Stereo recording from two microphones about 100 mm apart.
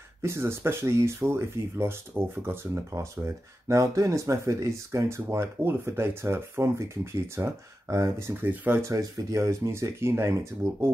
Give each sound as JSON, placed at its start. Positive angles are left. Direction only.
{"t": 0.2, "sound": "speech", "side_deg": -25}
{"t": 8.9, "sound": "speech", "side_deg": -30}